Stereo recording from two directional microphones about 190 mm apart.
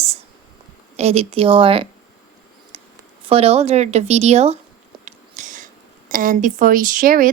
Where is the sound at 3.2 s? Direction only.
30° right (ahead or behind).